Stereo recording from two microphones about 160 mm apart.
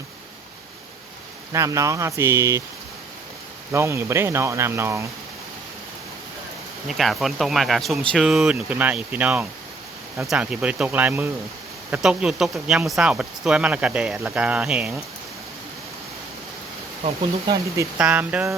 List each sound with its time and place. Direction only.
1.5 s speech: 20° right (ahead or behind)
3.7 s speech: 15° right (ahead or behind)
6.8 s speech: centre (ahead or behind)
17.9 s speech: 10° right (ahead or behind)